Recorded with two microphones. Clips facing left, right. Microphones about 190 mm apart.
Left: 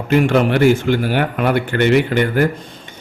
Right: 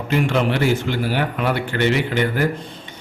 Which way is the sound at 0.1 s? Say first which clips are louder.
Left 5 dB; 50° left (ahead or behind).